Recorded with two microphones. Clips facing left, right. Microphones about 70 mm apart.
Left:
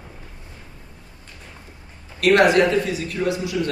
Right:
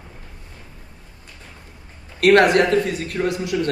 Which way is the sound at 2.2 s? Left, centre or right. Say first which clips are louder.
Right 1 dB; right.